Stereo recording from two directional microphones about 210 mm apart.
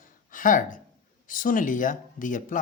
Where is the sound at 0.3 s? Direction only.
40° left (ahead or behind).